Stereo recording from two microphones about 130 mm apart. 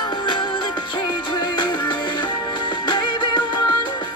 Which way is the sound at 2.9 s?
40° left (ahead or behind).